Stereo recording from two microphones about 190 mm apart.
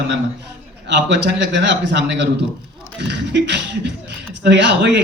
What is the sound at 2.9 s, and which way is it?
Beatboxing, 65° right (ahead or behind).